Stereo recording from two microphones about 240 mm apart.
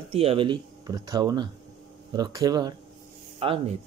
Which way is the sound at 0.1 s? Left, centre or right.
Right.